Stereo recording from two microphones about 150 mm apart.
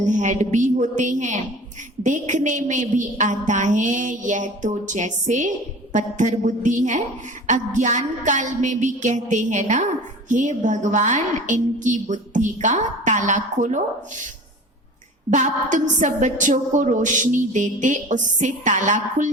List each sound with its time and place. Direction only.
0.0 s a woman's voice: 55° right (ahead or behind)
15.3 s a woman's voice: 55° right (ahead or behind)